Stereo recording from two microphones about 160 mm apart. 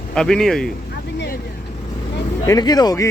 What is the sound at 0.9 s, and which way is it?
Vehicle, 80° left.